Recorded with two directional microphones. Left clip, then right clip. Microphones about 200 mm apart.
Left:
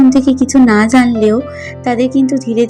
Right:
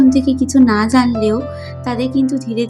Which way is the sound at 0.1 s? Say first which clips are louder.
Left 4 dB; 20° left (ahead or behind).